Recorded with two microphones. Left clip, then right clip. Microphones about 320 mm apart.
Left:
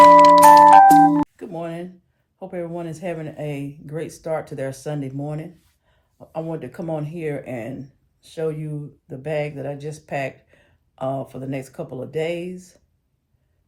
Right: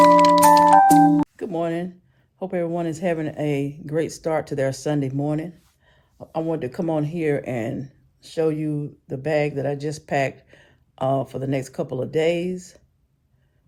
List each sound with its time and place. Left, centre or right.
0.0 s music: centre
1.4 s a sound: right
2.4 s speech: right